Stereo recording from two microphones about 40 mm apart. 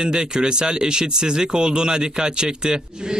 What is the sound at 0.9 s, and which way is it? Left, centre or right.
A man's voice, right.